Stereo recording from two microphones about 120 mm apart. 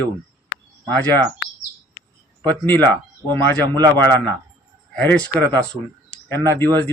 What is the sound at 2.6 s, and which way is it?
Speech, 15° left (ahead or behind).